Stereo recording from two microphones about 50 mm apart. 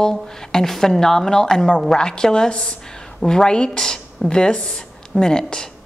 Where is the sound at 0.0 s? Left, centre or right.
Centre.